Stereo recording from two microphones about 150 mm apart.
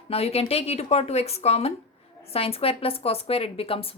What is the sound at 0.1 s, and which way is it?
A woman's voice, 45° left (ahead or behind).